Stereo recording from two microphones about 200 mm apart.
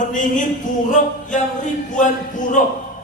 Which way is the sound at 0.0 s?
40° left (ahead or behind).